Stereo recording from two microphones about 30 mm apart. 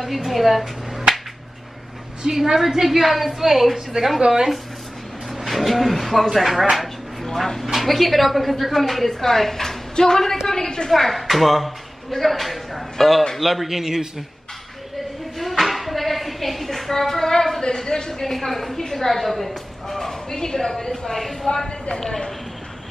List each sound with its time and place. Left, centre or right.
0.0 s a woman's voice: centre
2.2 s a man's voice: centre
4.2 s a man's voice: centre
5.3 s a sound: centre
6.3 s a woman's voice: centre
7.6 s a woman's voice: centre; by 10.9 s left
11.0 s a woman's voice: centre
15.3 s a sound: centre
17.7 s a woman's voice: left
18.2 s a woman's voice: centre
21.6 s speech: left